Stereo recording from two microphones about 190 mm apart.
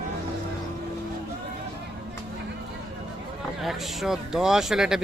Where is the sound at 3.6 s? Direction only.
Centre (ahead or behind).